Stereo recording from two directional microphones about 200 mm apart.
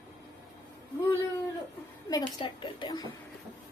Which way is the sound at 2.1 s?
20° left (ahead or behind).